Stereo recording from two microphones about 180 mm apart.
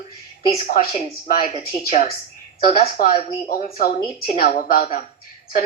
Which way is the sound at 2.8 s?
55° left (ahead or behind).